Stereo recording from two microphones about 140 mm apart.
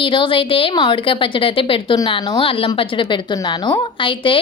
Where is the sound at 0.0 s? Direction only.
35° left (ahead or behind).